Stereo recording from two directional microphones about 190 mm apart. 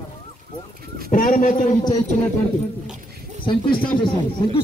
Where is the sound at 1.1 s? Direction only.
45° left (ahead or behind).